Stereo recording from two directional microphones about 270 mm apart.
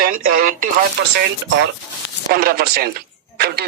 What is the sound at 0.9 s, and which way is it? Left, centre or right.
Speech, right.